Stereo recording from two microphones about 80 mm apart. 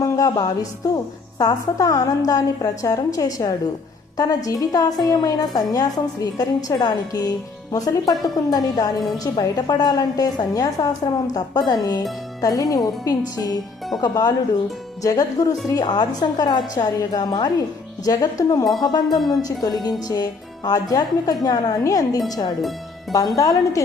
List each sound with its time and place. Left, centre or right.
0.0 s a woman's voice: left
15.0 s a woman's voice: left
15.7 s a woman's voice: left
19.0 s a woman's voice: centre
19.6 s a woman's voice: left